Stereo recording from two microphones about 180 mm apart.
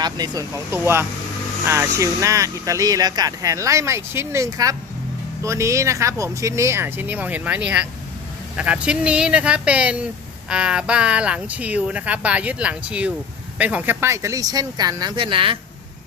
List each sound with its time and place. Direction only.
0.0 s speech: 20° right (ahead or behind)